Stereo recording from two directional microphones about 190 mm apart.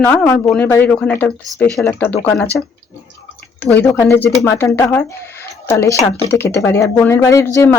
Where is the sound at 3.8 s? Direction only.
15° left (ahead or behind).